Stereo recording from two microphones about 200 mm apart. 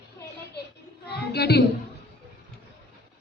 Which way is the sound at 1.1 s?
55° left (ahead or behind).